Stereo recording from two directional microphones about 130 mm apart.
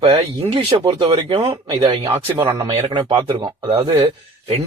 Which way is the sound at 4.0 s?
50° right (ahead or behind).